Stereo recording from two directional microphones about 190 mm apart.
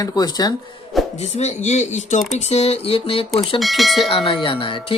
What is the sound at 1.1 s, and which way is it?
Speech, 35° left (ahead or behind).